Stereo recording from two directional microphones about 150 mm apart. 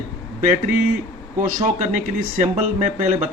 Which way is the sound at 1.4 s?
60° right (ahead or behind).